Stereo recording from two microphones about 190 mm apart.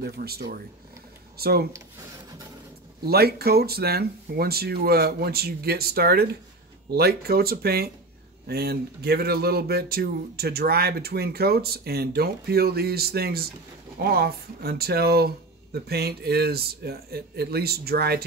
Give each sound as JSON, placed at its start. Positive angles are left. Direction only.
{"t": 0.0, "sound": "speech", "side_deg": -55}
{"t": 3.1, "sound": "speech", "side_deg": -55}